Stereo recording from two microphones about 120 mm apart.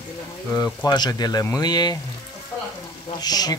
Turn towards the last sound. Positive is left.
turn(degrees=35)  # may be behind; listen again after turning